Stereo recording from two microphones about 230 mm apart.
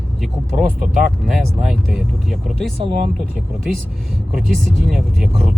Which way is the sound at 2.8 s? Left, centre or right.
Right.